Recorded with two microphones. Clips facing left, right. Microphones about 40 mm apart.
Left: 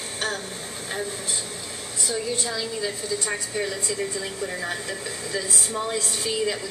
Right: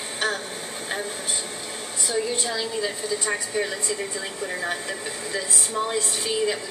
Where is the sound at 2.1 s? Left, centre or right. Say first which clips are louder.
Right 2 dB; centre.